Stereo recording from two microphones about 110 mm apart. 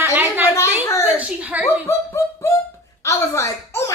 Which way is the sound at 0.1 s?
15° right (ahead or behind).